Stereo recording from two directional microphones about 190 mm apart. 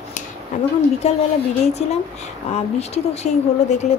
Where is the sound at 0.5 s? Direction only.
40° left (ahead or behind).